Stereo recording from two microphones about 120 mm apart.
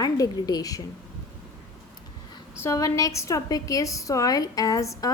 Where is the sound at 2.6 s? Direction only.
25° left (ahead or behind).